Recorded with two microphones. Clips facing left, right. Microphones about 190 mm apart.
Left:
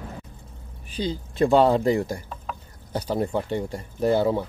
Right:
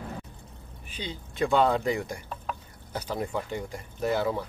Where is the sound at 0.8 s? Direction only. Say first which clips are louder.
Left 10 dB; 35° left (ahead or behind).